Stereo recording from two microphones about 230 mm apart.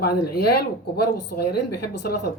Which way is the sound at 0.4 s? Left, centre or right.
Left.